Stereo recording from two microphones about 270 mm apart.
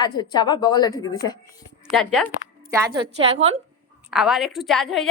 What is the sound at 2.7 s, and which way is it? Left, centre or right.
A woman's voice, centre.